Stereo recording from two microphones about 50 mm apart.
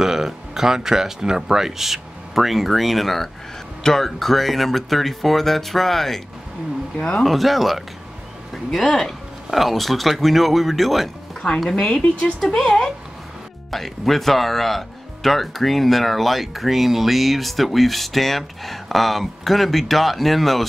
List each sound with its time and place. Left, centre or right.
0.0 s speech: centre
7.0 s speech: centre
7.2 s speech: centre
8.8 s speech: centre
11.7 s speech: centre